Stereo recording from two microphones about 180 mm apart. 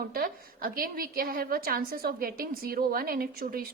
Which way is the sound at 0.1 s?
55° right (ahead or behind).